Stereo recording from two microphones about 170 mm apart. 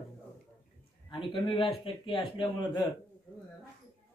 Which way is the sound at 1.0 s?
30° left (ahead or behind).